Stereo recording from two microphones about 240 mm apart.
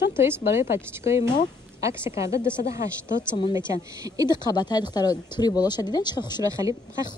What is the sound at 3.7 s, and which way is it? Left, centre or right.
Speech, centre.